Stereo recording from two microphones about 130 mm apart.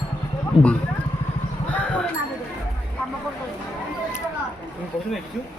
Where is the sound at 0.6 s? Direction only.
45° left (ahead or behind).